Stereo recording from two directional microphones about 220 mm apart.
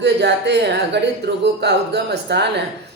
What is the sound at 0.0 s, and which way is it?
Speech, 50° right (ahead or behind).